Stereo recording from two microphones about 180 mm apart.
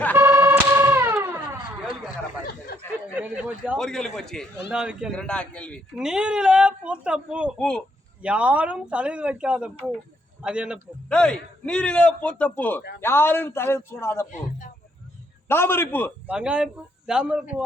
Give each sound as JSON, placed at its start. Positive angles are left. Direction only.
{"t": 0.2, "sound": "a sound", "side_deg": -15}
{"t": 3.2, "sound": "speech", "side_deg": -10}
{"t": 3.8, "sound": "a man's voice", "side_deg": 5}
{"t": 11.1, "sound": "a man's voice", "side_deg": 5}
{"t": 14.3, "sound": "speech", "side_deg": 45}
{"t": 15.4, "sound": "a man's voice", "side_deg": 15}
{"t": 16.2, "sound": "speech", "side_deg": -5}